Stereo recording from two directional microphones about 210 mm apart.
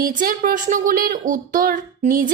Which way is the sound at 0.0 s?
40° right (ahead or behind).